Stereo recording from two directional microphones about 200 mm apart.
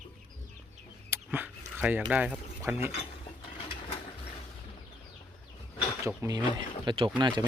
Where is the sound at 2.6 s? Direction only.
10° right (ahead or behind).